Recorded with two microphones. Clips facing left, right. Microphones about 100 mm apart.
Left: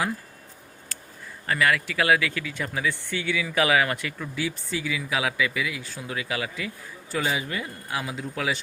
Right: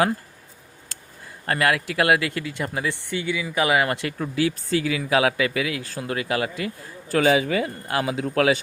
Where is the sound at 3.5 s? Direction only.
15° right (ahead or behind).